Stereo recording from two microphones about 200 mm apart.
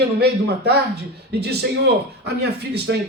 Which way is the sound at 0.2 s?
55° right (ahead or behind).